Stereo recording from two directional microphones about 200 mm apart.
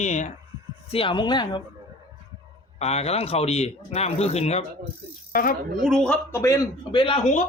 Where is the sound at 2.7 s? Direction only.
30° left (ahead or behind).